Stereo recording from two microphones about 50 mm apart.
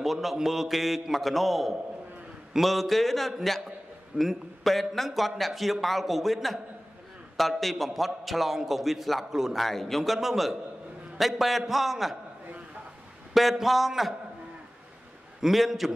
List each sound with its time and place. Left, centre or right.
0.0 s a man's voice: centre
13.3 s a man's voice: centre
15.4 s a man's voice: centre